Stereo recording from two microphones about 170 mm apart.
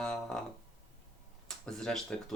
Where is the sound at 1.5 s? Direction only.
Centre (ahead or behind).